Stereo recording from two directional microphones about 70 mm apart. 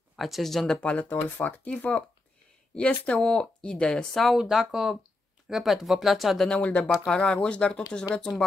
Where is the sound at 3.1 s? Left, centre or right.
Centre.